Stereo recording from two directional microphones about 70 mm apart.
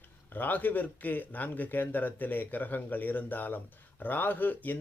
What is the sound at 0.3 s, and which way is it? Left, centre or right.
Speech, left.